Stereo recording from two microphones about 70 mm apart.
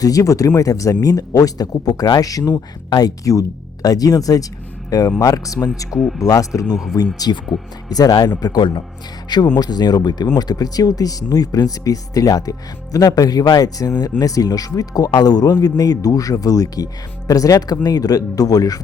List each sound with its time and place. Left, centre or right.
0.0 s speech: left
5.2 s speech: left
5.9 s speech: centre
6.1 s speech: left
6.7 s speech: centre
7.2 s speech: left
10.3 s speech: left
15.8 s speech: left